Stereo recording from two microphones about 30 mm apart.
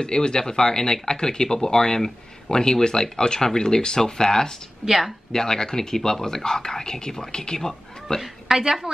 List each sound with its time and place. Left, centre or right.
0.0 s speech: left
4.8 s speech: centre
5.3 s speech: centre
8.5 s a woman's voice: centre
8.9 s a woman's voice: right